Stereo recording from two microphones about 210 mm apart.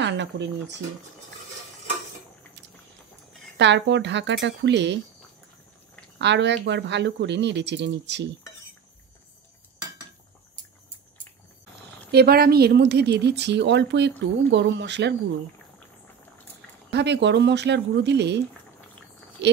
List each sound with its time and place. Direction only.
0.0 s speech: 55° right (ahead or behind)
3.5 s speech: 60° right (ahead or behind)
6.1 s speech: 55° right (ahead or behind)
12.1 s speech: 50° right (ahead or behind)
16.9 s speech: 55° right (ahead or behind)